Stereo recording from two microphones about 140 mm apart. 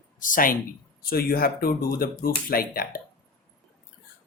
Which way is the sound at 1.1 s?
90° left.